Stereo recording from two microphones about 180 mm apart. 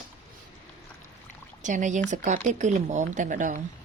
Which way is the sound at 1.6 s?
45° right (ahead or behind).